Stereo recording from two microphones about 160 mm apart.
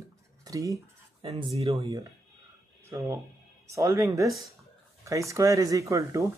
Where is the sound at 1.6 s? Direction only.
20° right (ahead or behind).